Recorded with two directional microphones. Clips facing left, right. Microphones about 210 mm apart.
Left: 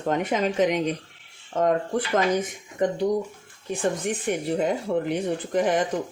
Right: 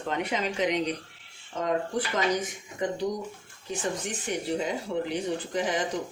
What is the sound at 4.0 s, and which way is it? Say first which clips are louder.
Speech: left 6 dB; 55° left (ahead or behind).